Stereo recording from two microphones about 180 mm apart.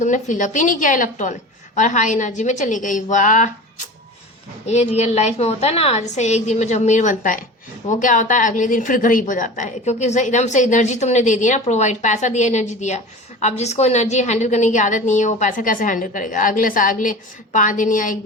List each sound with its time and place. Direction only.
0.0 s a woman's voice: 45° left (ahead or behind)
4.6 s a woman's voice: 35° left (ahead or behind)